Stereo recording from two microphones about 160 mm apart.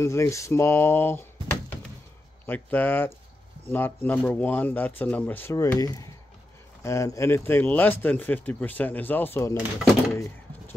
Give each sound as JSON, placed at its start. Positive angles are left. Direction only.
{"t": 0.0, "sound": "speech", "side_deg": 20}